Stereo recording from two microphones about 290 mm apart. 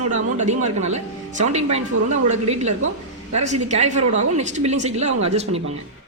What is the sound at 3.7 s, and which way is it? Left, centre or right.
Speech, right.